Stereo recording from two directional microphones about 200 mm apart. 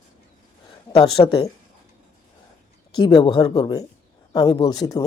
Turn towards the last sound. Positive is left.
turn(degrees=20)  # may be behind; listen again after turning